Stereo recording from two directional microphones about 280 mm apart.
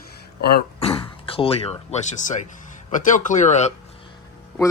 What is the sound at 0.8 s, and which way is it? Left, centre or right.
Speech, centre.